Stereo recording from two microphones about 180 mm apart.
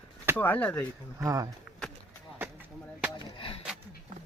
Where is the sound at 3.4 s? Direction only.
30° left (ahead or behind).